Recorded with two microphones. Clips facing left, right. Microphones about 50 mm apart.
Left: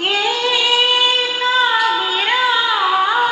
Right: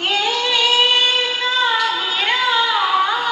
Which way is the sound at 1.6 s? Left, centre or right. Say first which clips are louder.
Left 2 dB; centre.